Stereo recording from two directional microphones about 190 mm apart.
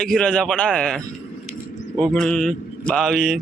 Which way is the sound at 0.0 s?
Centre (ahead or behind).